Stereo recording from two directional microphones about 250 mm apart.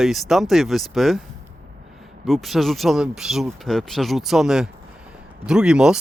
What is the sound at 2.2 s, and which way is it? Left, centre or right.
Speech, centre.